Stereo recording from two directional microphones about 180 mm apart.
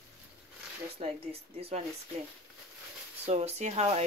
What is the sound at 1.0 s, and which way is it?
Speech, 35° right (ahead or behind).